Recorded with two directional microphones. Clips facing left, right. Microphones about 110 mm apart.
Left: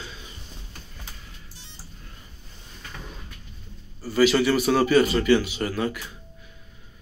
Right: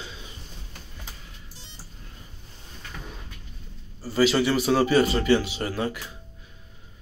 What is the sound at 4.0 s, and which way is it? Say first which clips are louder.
A man's voice: left 2 dB; 30° right (ahead or behind).